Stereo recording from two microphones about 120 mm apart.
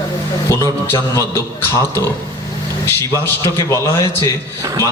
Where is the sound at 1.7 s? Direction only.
25° left (ahead or behind).